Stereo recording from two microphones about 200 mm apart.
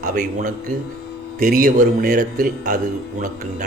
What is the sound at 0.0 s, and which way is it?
A man's voice, 40° right (ahead or behind).